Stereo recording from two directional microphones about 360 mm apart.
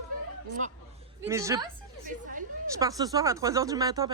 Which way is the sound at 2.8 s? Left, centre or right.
Centre.